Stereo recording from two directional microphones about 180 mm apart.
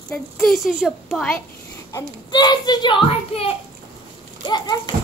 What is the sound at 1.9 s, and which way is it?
A child's voice, 25° left (ahead or behind).